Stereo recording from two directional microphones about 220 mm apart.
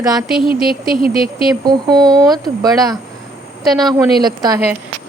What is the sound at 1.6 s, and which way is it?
Speech, 20° right (ahead or behind).